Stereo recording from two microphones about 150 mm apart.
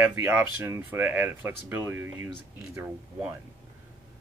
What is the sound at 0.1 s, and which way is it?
Speech, 15° right (ahead or behind).